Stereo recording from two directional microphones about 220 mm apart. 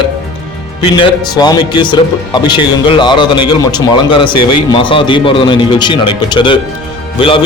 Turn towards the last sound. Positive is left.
turn(degrees=25)  # may be behind; listen again after turning